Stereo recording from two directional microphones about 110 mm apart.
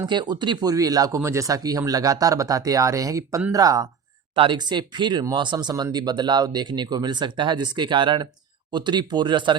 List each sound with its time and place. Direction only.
0.0 s speech: 40° right (ahead or behind)
4.4 s speech: 45° right (ahead or behind)